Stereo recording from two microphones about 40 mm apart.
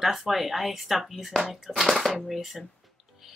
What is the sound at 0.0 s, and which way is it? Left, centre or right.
A woman's voice, centre.